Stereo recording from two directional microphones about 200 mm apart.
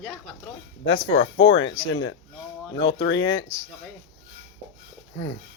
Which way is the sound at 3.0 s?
65° left (ahead or behind).